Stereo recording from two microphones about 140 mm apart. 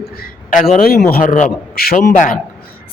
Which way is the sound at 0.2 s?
75° left (ahead or behind).